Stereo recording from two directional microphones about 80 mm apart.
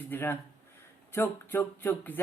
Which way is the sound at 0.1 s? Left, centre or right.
Left.